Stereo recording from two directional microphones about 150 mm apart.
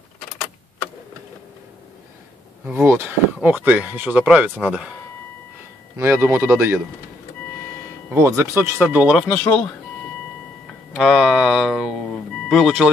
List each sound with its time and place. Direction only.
2.6 s speech: 10° right (ahead or behind)
5.9 s speech: 15° right (ahead or behind)
8.1 s speech: 15° right (ahead or behind)
9.3 s speech: 10° left (ahead or behind)
10.9 s speech: 5° right (ahead or behind)